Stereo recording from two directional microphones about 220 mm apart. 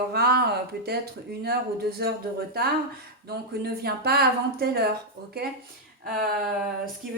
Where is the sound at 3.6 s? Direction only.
45° right (ahead or behind).